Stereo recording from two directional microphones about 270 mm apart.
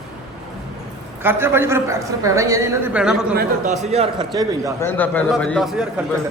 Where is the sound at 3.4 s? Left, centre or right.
Right.